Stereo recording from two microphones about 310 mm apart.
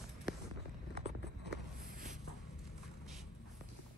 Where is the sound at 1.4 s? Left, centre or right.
Right.